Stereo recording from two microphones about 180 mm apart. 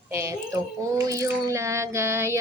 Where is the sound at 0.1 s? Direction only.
15° right (ahead or behind).